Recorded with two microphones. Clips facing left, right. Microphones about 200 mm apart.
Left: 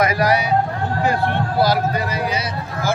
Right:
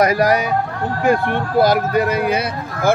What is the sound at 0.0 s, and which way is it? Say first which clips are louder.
Speech: right 3 dB; 40° right (ahead or behind).